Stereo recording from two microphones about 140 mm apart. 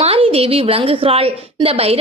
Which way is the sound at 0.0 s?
45° right (ahead or behind).